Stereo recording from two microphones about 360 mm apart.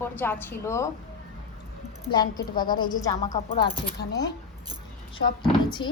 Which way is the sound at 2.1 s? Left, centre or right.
Centre.